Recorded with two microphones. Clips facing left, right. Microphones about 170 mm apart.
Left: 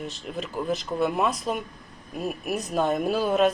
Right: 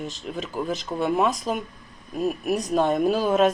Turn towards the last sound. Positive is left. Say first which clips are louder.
# right 2 dB
turn(degrees=0)  # may be behind; listen again after turning